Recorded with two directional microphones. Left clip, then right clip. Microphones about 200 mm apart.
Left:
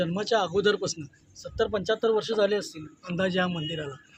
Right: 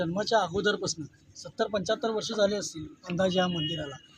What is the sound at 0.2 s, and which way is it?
Speech, 30° left (ahead or behind).